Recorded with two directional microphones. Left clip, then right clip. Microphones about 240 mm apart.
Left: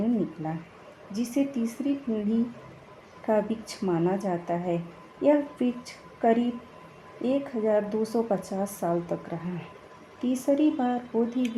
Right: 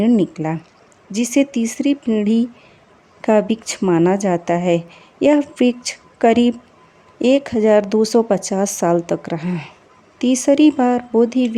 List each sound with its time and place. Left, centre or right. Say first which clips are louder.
1.1 s speech: right 11 dB; right